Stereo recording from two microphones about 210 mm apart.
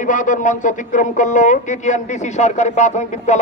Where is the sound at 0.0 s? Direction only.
40° left (ahead or behind).